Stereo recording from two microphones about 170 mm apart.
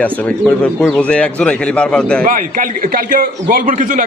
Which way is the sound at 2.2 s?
55° right (ahead or behind).